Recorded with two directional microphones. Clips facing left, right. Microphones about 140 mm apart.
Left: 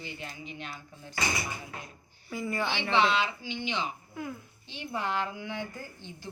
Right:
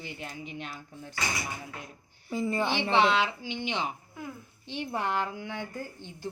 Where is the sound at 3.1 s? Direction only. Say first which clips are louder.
Right 2 dB; 60° right (ahead or behind); by 5.6 s 45° right (ahead or behind).